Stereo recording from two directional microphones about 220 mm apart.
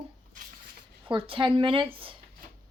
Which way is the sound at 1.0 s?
25° right (ahead or behind).